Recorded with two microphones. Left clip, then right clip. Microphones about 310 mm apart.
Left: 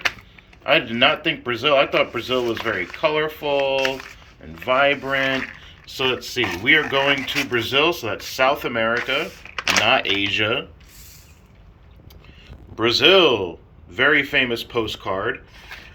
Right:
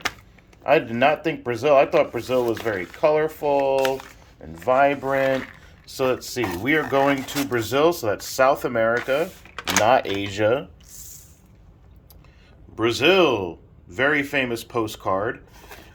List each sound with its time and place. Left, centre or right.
0.6 s speech: centre
12.7 s speech: centre